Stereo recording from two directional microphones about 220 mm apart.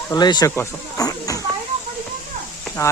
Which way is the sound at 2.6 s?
10° left (ahead or behind).